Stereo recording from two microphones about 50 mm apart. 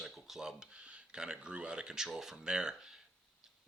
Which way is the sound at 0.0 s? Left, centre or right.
Centre.